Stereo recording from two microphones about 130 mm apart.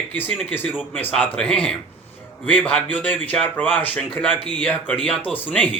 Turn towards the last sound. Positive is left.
turn(degrees=15)  # may be behind; listen again after turning